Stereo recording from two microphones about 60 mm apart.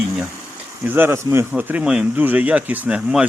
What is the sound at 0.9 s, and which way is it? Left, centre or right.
Speech, right.